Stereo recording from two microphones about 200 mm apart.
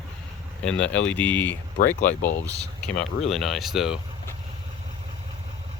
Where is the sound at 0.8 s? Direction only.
5° left (ahead or behind).